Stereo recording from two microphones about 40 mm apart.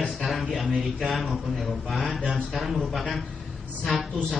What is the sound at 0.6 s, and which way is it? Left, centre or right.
A man's voice, centre.